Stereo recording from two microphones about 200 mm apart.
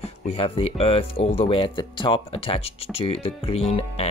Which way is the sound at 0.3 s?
30° left (ahead or behind).